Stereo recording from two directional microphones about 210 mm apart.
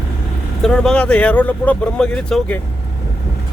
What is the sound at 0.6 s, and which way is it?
Speech, 5° left (ahead or behind).